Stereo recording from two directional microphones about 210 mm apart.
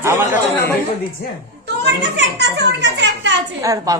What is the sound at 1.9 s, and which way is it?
A child's voice, 55° right (ahead or behind).